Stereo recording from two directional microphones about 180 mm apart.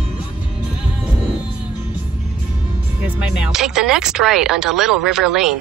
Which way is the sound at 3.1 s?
5° right (ahead or behind).